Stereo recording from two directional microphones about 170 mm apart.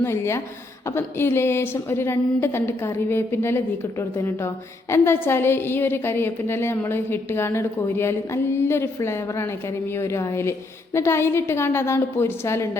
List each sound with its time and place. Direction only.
0.0 s a woman's voice: 15° left (ahead or behind)